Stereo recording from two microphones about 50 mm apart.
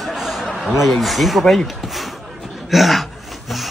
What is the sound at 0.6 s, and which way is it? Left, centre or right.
Speech, centre.